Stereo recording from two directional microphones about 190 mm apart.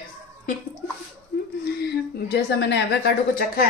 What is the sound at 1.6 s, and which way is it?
A woman's voice, 55° left (ahead or behind).